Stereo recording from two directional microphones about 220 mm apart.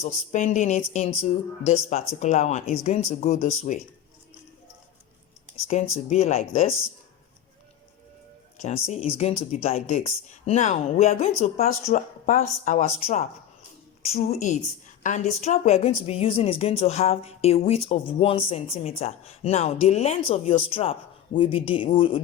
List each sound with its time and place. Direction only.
0.0 s speech: 30° left (ahead or behind)
5.6 s a woman's voice: 30° left (ahead or behind)
8.6 s a woman's voice: 30° left (ahead or behind)